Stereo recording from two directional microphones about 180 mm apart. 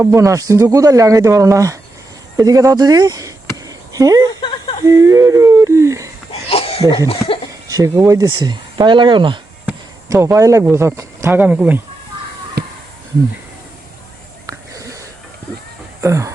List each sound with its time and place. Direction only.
0.0 s speech: 15° right (ahead or behind)
3.7 s a sound: 20° right (ahead or behind)
4.3 s speech: 25° left (ahead or behind)
4.8 s speech: 15° right (ahead or behind)
6.5 s a sound: 30° left (ahead or behind)
7.7 s speech: 20° right (ahead or behind)
10.1 s speech: 15° right (ahead or behind)
12.6 s a sound: 60° right (ahead or behind)
14.7 s wheeze: 20° right (ahead or behind)
16.0 s speech: 15° right (ahead or behind)